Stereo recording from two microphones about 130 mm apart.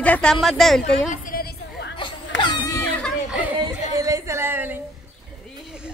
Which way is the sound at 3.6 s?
25° right (ahead or behind).